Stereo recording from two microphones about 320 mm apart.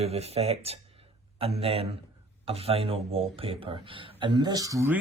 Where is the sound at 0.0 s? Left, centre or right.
Centre.